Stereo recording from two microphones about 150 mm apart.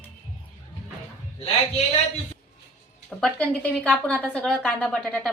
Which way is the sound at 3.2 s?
10° left (ahead or behind).